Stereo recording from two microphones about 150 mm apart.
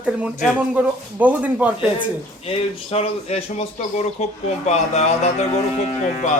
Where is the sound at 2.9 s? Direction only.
45° left (ahead or behind).